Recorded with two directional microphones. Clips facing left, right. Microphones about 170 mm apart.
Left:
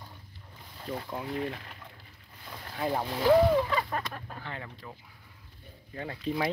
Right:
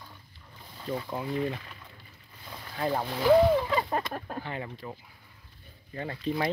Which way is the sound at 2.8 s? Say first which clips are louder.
Right 1 dB; centre (ahead or behind).